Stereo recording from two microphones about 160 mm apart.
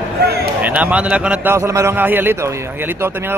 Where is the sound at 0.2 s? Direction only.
85° right.